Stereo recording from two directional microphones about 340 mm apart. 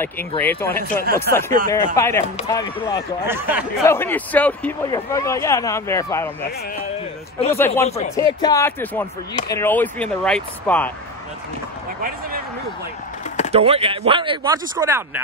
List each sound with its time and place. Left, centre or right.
0.0 s speech: centre
1.3 s speech: right
2.0 s speech: centre
3.3 s speech: centre
3.8 s speech: centre
7.3 s speech: centre
13.5 s speech: centre